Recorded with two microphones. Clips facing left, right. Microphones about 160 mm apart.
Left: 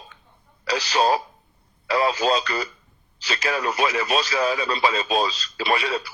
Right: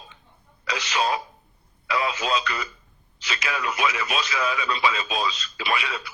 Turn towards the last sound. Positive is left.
turn(degrees=35)  # may be behind; listen again after turning